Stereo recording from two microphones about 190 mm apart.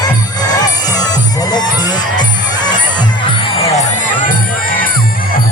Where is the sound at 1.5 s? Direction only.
20° left (ahead or behind).